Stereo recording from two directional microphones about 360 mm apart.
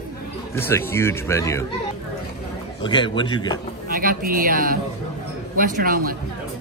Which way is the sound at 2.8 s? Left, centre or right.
Centre.